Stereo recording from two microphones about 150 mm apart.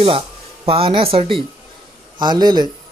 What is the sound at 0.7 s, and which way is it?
Speech, 40° right (ahead or behind).